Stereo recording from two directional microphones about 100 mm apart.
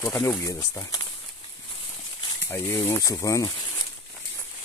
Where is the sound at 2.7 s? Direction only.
25° left (ahead or behind).